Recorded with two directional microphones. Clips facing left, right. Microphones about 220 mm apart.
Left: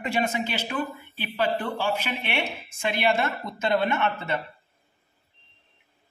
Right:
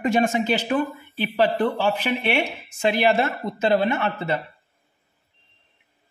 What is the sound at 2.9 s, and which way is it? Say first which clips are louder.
A man's voice: right 2 dB; 35° right (ahead or behind).